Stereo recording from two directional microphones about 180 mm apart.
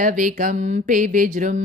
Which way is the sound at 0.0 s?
45° right (ahead or behind).